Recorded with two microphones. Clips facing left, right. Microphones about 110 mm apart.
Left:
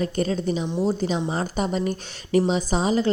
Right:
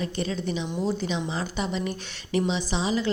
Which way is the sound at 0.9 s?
40° left (ahead or behind).